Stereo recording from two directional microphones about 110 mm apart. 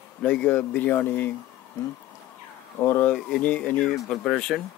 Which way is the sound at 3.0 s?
10° left (ahead or behind).